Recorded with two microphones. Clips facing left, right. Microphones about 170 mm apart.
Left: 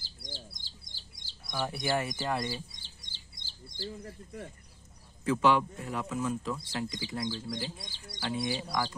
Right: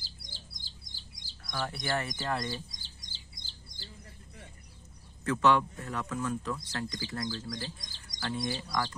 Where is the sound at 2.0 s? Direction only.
10° left (ahead or behind).